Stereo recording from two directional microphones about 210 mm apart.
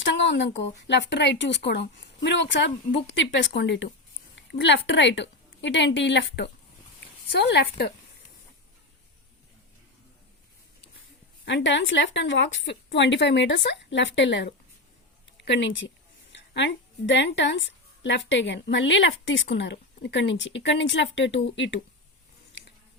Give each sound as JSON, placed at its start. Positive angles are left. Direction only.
{"t": 0.0, "sound": "a woman's voice", "side_deg": 55}
{"t": 11.4, "sound": "a woman's voice", "side_deg": 60}